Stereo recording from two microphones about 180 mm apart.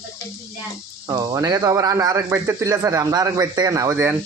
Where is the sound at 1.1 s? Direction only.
20° right (ahead or behind).